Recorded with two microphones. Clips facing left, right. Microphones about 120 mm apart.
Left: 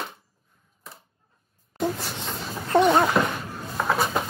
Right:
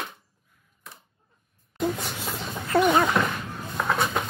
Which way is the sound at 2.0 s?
5° right (ahead or behind).